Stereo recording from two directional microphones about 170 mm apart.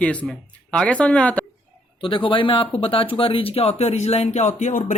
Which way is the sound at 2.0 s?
30° left (ahead or behind).